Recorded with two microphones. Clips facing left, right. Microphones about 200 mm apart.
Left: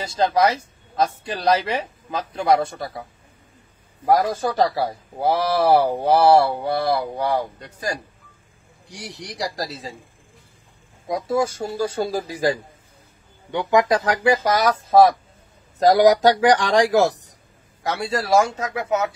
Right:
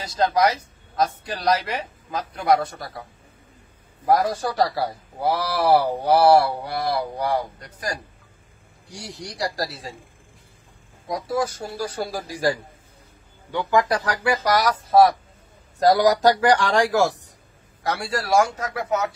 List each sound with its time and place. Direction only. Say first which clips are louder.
0.0 s speech: left 1 dB; 25° left (ahead or behind)
4.1 s speech: left 1 dB; 25° left (ahead or behind)
9.2 s speech: right 1 dB; 20° left (ahead or behind)
11.1 s speech: left 3 dB; 25° left (ahead or behind)